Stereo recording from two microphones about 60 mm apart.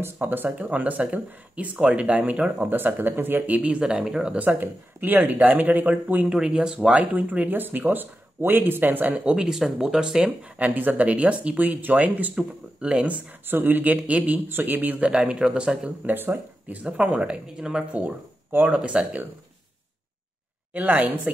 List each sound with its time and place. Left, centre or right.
0.0 s speech: right
2.6 s speech: right
3.8 s speech: centre
4.4 s speech: right
6.2 s speech: centre
7.0 s speech: right
9.1 s speech: centre
10.6 s speech: right
12.4 s speech: centre
15.0 s speech: centre
16.1 s speech: right
20.7 s speech: right